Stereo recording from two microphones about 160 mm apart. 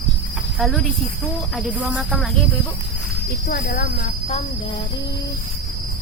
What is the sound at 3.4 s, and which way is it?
Speech, 70° left (ahead or behind).